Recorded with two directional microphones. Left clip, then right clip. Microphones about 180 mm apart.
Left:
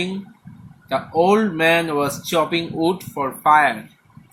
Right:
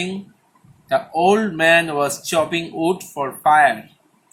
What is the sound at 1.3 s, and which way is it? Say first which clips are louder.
Speech: right 4 dB; 25° right (ahead or behind).